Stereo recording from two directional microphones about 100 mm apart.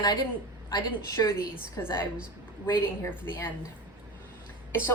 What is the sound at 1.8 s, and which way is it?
Speech, 20° left (ahead or behind).